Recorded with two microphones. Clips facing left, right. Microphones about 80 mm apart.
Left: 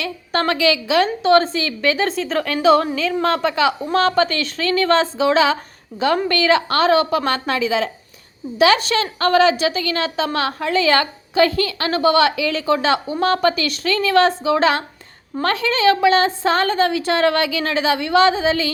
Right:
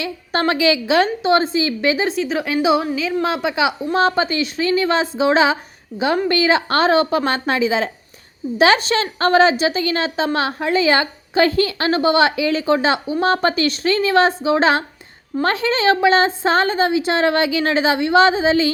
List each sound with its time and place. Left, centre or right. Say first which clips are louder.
0.0 s a woman's voice: right 1 dB; right
2.0 s a woman's voice: right 1 dB; centre; by 18.7 s right